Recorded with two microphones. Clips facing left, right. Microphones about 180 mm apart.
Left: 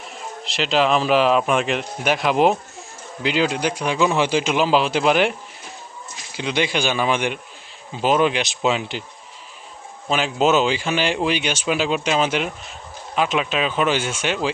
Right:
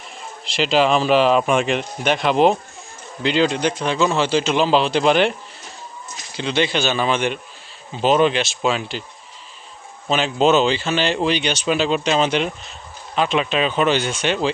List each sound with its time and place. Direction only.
0.4 s speech: centre (ahead or behind)
6.3 s speech: 10° left (ahead or behind)
10.1 s speech: 10° left (ahead or behind)